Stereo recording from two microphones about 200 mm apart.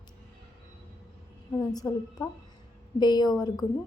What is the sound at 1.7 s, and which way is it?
A woman's voice, 20° left (ahead or behind).